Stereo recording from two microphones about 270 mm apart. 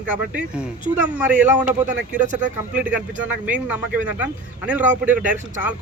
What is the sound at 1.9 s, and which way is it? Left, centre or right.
Speech, right.